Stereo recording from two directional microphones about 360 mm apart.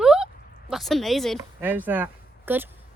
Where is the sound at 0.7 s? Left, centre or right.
Centre.